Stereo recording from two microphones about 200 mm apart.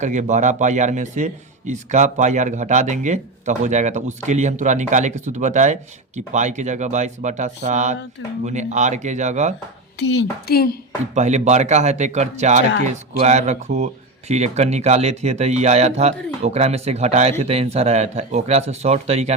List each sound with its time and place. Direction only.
0.0 s speech: 35° right (ahead or behind)
10.0 s speech: 60° left (ahead or behind)
11.1 s speech: 35° right (ahead or behind)